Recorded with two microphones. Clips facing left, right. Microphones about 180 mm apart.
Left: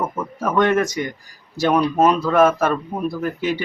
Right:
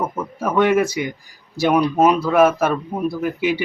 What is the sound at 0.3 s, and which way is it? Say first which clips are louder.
Speech: right 1 dB; 5° right (ahead or behind).